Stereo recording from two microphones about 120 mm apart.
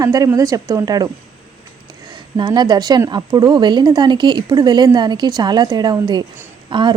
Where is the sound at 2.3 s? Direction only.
40° right (ahead or behind).